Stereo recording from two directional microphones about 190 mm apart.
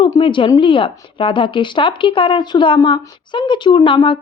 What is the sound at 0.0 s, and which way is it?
Speech, 25° left (ahead or behind).